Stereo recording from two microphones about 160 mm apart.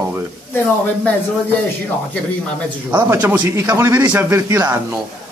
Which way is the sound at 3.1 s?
10° right (ahead or behind).